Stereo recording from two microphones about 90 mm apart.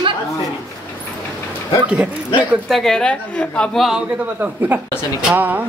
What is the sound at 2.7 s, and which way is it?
A woman's voice, 5° left (ahead or behind).